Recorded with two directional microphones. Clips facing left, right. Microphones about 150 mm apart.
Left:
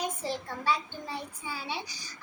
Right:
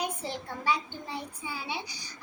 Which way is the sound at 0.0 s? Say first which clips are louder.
Left 1 dB; 15° right (ahead or behind).